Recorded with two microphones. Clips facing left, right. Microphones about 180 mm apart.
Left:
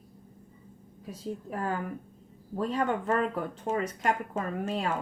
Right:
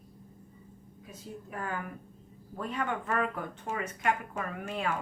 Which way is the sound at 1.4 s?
35° left (ahead or behind).